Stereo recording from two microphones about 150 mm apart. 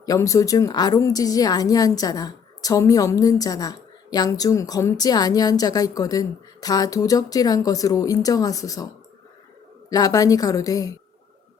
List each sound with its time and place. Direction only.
0.0 s a woman's voice: 20° left (ahead or behind)
9.9 s a woman's voice: 25° left (ahead or behind)